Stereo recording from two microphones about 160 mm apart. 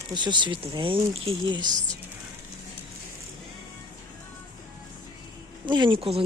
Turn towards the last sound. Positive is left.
turn(degrees=-35)  # may be behind; listen again after turning